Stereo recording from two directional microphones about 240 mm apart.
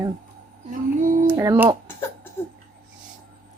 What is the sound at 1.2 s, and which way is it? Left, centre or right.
Speech, centre.